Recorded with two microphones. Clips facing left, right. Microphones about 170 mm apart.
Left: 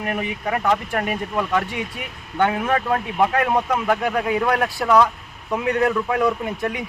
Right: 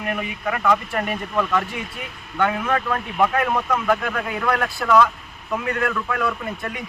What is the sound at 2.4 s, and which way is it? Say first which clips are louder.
A man's voice: left 2 dB; 25° left (ahead or behind).